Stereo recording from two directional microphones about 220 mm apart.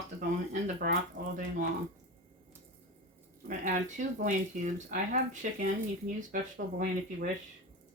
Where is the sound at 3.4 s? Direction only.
35° right (ahead or behind).